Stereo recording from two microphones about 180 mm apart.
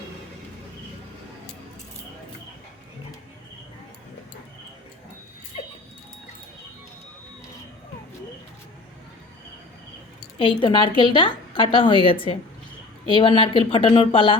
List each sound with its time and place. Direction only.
10.3 s a woman's voice: 30° left (ahead or behind)